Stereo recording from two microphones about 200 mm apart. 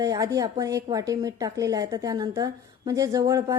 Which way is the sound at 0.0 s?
15° right (ahead or behind).